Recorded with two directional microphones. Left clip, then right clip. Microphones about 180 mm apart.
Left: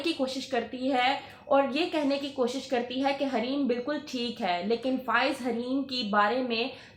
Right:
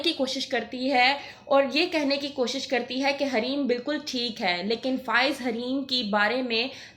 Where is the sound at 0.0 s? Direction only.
15° right (ahead or behind).